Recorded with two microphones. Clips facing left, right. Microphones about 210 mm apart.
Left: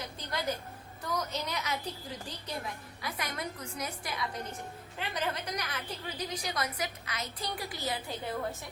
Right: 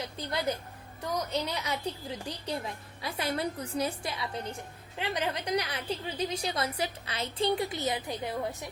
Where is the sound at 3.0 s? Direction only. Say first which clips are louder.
Right 6 dB; 30° right (ahead or behind).